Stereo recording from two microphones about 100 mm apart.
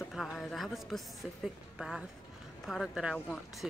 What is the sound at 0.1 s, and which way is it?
A woman's voice, centre (ahead or behind).